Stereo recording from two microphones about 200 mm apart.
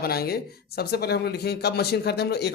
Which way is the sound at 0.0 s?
50° left (ahead or behind).